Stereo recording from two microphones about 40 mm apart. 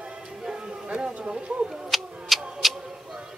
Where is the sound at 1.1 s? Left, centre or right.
Right.